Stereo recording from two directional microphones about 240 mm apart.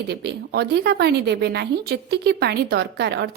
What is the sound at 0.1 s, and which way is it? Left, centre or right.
A woman's voice, right.